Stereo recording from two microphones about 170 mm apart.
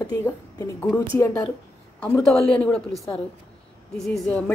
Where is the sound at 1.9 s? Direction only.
5° left (ahead or behind).